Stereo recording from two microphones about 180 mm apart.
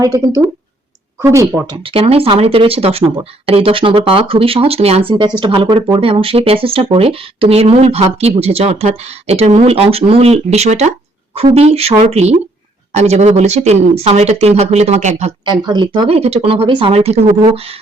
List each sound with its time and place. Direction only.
0.0 s speech: 20° right (ahead or behind)
1.7 s speech: 30° right (ahead or behind)
15.4 s speech: 25° right (ahead or behind)